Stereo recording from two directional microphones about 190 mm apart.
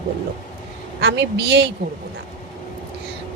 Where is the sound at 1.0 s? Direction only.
65° right (ahead or behind).